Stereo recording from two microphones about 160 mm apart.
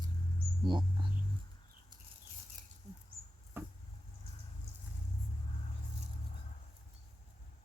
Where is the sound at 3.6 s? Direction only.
15° right (ahead or behind).